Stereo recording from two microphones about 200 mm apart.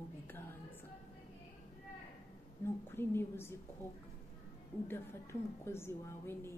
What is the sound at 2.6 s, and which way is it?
Speech, 10° left (ahead or behind).